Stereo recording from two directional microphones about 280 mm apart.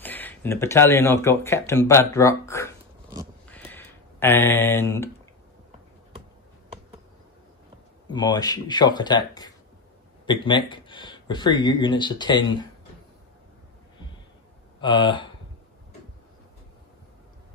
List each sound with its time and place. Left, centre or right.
0.0 s speech: centre
3.4 s a sound: centre
8.1 s speech: centre
14.8 s speech: centre